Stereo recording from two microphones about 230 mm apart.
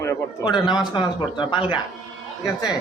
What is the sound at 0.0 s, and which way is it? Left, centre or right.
A man's voice, centre.